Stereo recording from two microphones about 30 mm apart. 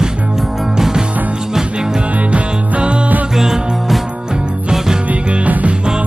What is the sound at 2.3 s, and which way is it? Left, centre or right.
Music, right.